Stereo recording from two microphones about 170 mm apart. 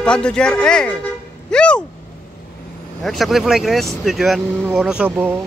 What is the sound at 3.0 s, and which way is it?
Speech, centre (ahead or behind).